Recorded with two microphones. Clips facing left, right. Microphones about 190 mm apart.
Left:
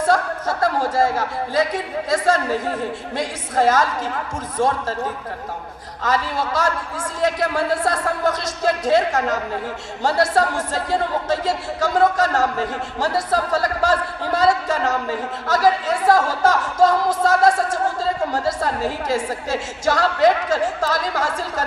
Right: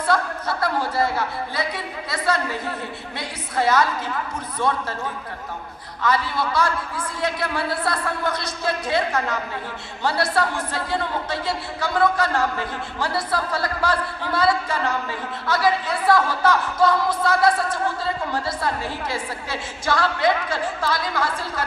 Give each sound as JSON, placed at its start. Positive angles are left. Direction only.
{"t": 0.0, "sound": "a woman's voice", "side_deg": 45}
{"t": 6.0, "sound": "a woman's voice", "side_deg": 40}